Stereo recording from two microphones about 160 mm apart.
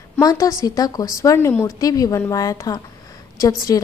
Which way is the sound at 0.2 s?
20° left (ahead or behind).